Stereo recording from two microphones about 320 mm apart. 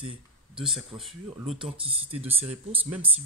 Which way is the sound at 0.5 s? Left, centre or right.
Centre.